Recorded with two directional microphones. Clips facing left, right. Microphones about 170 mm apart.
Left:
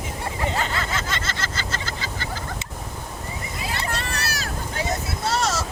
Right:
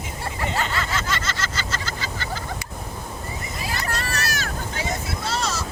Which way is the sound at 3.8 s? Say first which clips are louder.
Right 1 dB; 30° left (ahead or behind).